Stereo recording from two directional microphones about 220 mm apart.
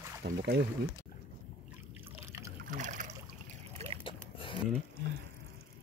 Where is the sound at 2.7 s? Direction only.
35° right (ahead or behind).